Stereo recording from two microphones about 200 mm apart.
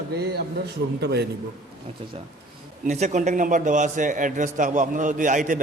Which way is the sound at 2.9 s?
35° right (ahead or behind).